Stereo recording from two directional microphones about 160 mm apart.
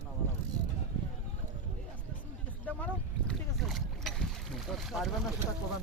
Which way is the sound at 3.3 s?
Centre (ahead or behind).